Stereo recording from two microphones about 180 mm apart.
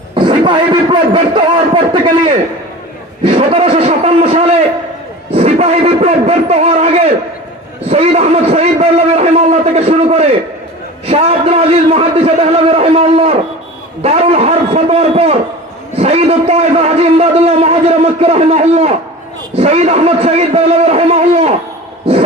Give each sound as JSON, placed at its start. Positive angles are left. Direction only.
{"t": 0.1, "sound": "a man's voice", "side_deg": -25}